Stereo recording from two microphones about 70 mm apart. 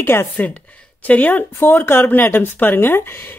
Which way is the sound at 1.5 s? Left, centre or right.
Left.